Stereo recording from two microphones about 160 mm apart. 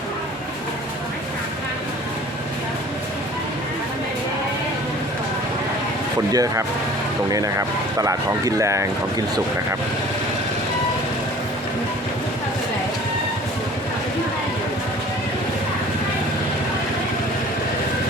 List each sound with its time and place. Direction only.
6.3 s speech: 20° right (ahead or behind)